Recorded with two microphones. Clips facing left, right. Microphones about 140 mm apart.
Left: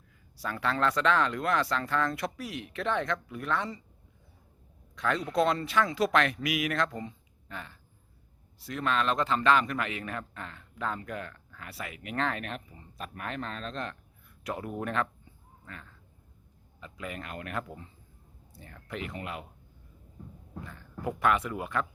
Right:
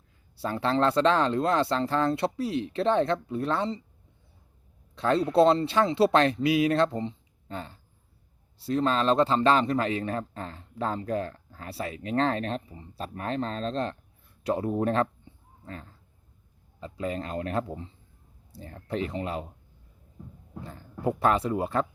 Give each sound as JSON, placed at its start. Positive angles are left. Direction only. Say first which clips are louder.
{"t": 0.3, "sound": "speech", "louder": "right 5 dB", "side_deg": -30}
{"t": 4.9, "sound": "speech", "louder": "right 6 dB", "side_deg": -30}
{"t": 21.0, "sound": "speech", "louder": "right 3 dB", "side_deg": -30}